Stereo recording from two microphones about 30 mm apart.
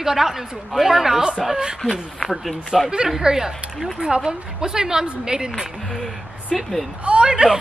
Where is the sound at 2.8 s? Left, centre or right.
Centre.